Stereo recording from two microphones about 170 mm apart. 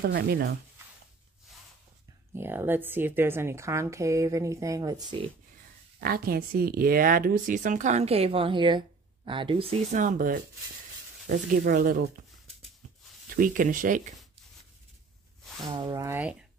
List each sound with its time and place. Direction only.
0.0 s speech: 65° right (ahead or behind)
2.3 s speech: 15° right (ahead or behind)
5.9 s speech: 60° right (ahead or behind); by 9.8 s 30° right (ahead or behind)
9.8 s speech: 50° right (ahead or behind)
13.3 s speech: 55° right (ahead or behind)
15.7 s speech: 25° right (ahead or behind)